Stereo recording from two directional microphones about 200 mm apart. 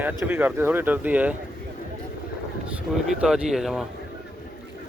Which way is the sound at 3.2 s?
5° right (ahead or behind).